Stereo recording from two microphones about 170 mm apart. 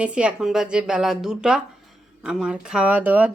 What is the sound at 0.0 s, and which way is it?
Speech, 5° right (ahead or behind).